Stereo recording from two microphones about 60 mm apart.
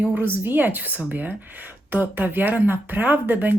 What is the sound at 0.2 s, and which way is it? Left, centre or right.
Speech, right.